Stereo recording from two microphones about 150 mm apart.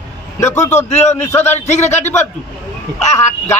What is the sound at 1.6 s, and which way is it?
Speech, 50° left (ahead or behind).